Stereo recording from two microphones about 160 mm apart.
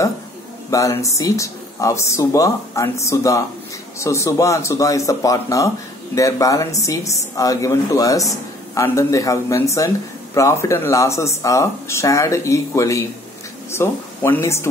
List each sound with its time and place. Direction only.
0.7 s speech: 20° left (ahead or behind)